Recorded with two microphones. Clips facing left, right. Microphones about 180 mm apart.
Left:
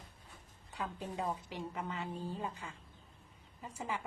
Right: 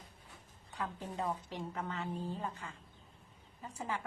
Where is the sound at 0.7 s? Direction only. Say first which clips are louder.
Even; 10° left (ahead or behind).